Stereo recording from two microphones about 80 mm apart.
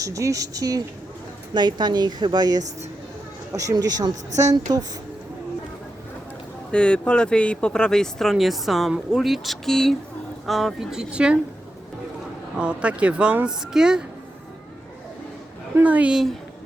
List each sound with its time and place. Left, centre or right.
0.0 s speech: right
1.5 s a woman's voice: right
3.5 s speech: right
6.7 s speech: centre
12.5 s speech: centre
15.8 s a woman's voice: centre